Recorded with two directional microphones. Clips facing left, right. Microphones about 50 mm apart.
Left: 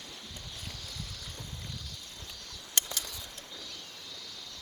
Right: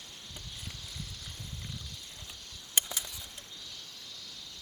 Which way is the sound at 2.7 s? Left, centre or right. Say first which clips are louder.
Even; centre.